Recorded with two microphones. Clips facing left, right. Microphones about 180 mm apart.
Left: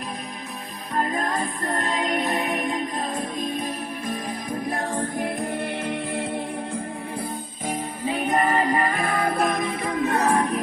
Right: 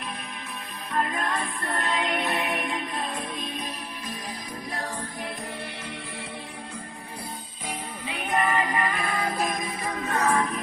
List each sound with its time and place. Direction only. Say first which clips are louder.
0.9 s music: left 3 dB; 35° left (ahead or behind); by 6.4 s 50° left (ahead or behind)
7.7 s music: left 8 dB; 45° left (ahead or behind)
10.1 s music: left 2 dB; 35° left (ahead or behind)